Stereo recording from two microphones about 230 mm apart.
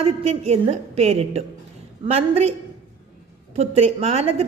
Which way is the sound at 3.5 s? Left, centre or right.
Right.